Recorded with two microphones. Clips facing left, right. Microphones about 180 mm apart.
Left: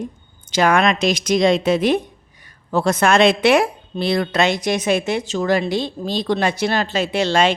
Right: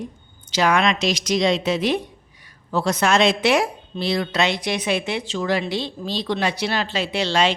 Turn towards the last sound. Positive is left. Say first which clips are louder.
# left 3 dB
turn(degrees=50)  # may be behind; listen again after turning